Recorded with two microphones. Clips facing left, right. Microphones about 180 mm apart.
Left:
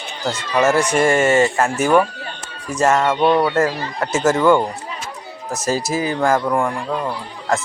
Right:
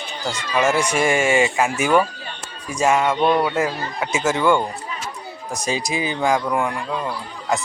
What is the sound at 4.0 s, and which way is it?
A man's voice, 10° right (ahead or behind).